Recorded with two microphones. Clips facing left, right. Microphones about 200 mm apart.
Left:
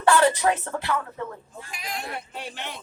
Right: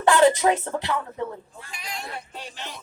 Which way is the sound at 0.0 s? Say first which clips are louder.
Right 2 dB; 20° right (ahead or behind).